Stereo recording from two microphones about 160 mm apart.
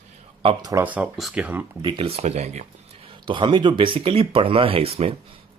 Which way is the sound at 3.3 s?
30° right (ahead or behind).